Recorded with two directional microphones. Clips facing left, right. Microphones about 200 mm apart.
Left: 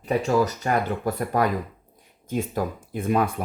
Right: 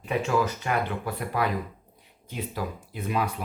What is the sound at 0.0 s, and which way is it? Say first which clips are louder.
Speech: left 4 dB; 40° left (ahead or behind).